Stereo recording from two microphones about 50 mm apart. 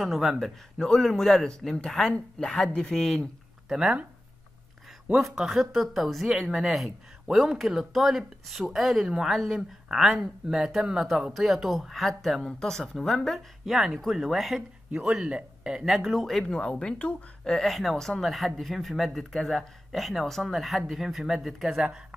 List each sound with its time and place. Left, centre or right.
0.0 s speech: centre
0.7 s speech: centre
3.6 s speech: centre
5.1 s speech: centre
13.7 s speech: centre
15.2 s speech: right
15.7 s speech: centre
16.4 s speech: centre
17.6 s speech: centre
19.3 s speech: centre
19.9 s speech: centre